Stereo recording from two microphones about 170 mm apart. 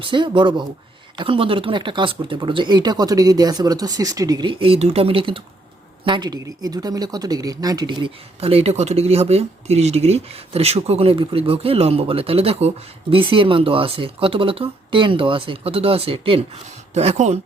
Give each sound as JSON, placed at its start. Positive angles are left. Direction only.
{"t": 0.0, "sound": "speech", "side_deg": -30}